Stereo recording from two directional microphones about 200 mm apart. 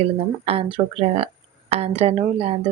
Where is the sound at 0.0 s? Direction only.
30° right (ahead or behind).